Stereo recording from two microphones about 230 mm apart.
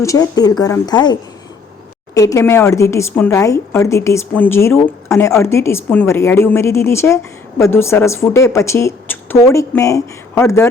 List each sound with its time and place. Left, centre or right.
0.0 s speech: centre